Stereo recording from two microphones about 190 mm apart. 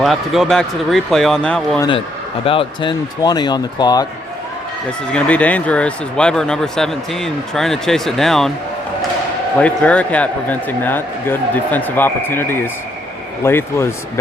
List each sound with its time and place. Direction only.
0.0 s speech: centre (ahead or behind)
1.9 s speech: 30° left (ahead or behind)
4.9 s speech: 5° left (ahead or behind)
9.6 s speech: 5° left (ahead or behind)